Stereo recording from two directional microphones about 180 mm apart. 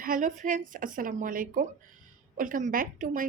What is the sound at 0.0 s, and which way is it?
Speech, 50° right (ahead or behind).